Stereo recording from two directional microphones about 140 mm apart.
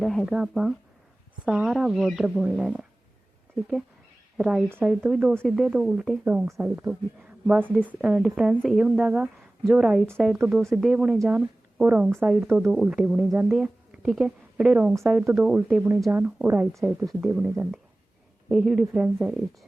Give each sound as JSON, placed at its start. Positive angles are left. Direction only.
{"t": 0.0, "sound": "speech", "side_deg": 0}
{"t": 4.4, "sound": "a woman's voice", "side_deg": -5}
{"t": 10.7, "sound": "speech", "side_deg": 0}